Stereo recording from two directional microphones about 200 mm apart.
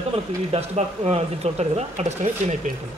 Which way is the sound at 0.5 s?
30° right (ahead or behind).